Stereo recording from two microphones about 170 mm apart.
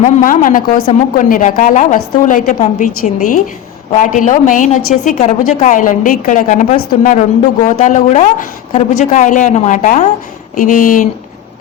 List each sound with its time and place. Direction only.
0.0 s a woman's voice: 50° left (ahead or behind)